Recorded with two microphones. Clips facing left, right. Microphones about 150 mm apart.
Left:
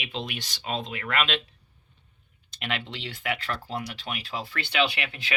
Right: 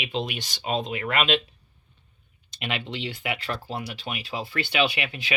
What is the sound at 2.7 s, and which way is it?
Speech, 20° right (ahead or behind).